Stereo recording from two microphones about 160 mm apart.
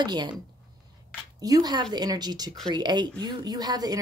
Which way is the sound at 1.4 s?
25° right (ahead or behind).